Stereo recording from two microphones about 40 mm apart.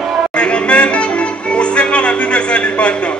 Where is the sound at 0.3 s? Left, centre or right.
Left.